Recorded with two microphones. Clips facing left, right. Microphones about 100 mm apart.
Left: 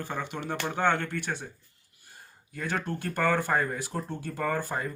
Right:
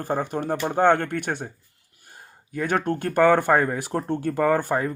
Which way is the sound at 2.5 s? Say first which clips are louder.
Right 8 dB; 60° right (ahead or behind).